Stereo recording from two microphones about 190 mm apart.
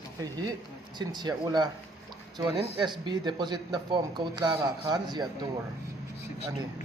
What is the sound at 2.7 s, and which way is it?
Speech, 25° right (ahead or behind).